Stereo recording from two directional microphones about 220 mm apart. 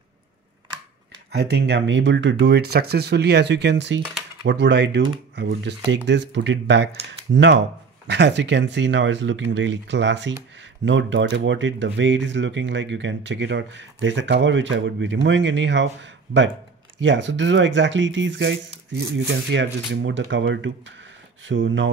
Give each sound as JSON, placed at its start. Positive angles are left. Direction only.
{"t": 1.3, "sound": "speech", "side_deg": -50}